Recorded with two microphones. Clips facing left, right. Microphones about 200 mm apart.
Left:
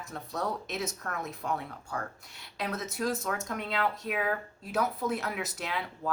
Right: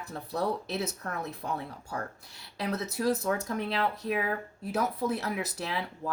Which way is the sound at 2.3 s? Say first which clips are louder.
Right 3 dB; 35° right (ahead or behind).